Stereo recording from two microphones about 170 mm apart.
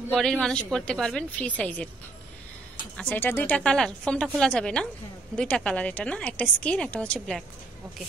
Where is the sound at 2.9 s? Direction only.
10° left (ahead or behind).